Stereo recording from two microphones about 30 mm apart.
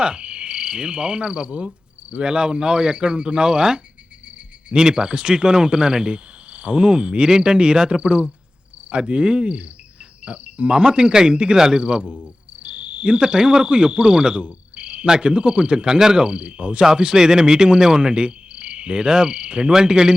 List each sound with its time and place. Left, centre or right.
0.0 s cricket: right
7.3 s speech: right
8.9 s cricket: right
10.2 s insect: right
10.7 s speech: right
11.8 s speech: right
14.4 s insect: right
15.0 s cricket: right
15.9 s cricket: right
16.8 s speech: right
18.1 s cricket: right
19.0 s cricket: right
19.7 s speech: right